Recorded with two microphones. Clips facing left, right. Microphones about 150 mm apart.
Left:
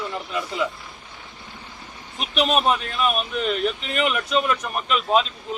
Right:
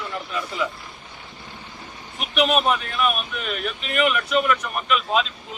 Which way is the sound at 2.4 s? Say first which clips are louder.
Even; 30° left (ahead or behind).